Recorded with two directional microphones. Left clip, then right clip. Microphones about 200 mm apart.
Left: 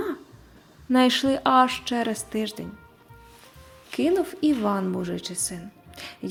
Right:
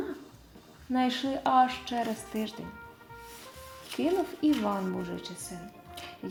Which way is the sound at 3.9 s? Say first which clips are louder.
Left 6 dB; 20° left (ahead or behind).